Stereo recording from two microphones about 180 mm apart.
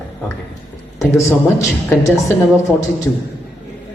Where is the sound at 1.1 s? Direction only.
15° left (ahead or behind).